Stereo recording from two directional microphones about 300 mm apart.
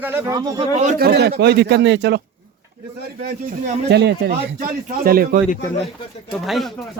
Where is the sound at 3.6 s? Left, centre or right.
Right.